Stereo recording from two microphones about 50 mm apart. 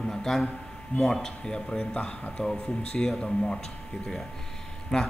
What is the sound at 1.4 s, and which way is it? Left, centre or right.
Speech, centre.